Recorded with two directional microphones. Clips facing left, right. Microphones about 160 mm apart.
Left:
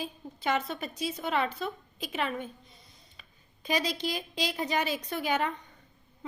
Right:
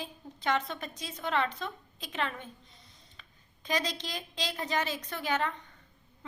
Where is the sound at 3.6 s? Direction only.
10° left (ahead or behind).